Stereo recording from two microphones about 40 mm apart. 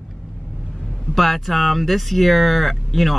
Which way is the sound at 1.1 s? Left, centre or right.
Centre.